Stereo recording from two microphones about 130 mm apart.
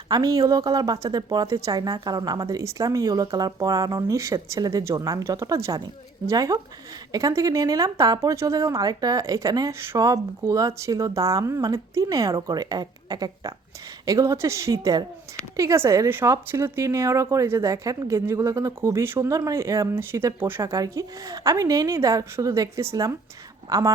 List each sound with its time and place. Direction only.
0.1 s a woman's voice: 25° right (ahead or behind)